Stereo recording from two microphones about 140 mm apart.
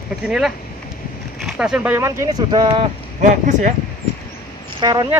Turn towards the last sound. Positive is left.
turn(degrees=-30)  # may be behind; listen again after turning